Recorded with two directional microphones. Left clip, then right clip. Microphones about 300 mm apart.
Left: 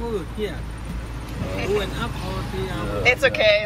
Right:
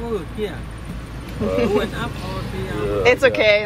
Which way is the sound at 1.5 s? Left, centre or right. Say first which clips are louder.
Right 5 dB; centre.